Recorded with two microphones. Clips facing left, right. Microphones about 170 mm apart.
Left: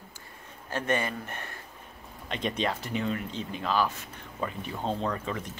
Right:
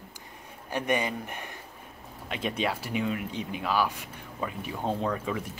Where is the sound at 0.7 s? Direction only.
15° right (ahead or behind).